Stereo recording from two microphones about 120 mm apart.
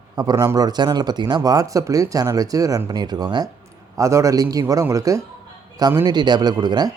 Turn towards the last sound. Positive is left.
turn(degrees=-35)  # may be behind; listen again after turning